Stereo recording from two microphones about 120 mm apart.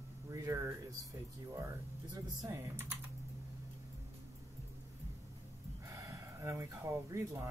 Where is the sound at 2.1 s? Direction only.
25° right (ahead or behind).